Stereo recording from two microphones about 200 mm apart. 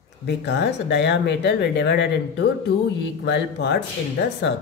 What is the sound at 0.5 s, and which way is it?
Speech, 60° left (ahead or behind).